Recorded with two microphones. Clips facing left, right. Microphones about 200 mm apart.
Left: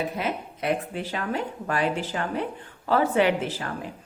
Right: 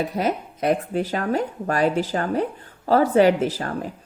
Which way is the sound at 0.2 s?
40° right (ahead or behind).